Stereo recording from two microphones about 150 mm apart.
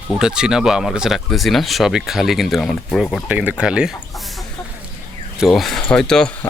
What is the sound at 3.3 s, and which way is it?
Speech, 10° right (ahead or behind).